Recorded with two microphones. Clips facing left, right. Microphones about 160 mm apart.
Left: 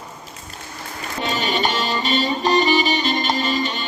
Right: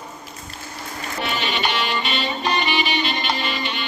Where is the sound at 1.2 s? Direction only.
40° left (ahead or behind).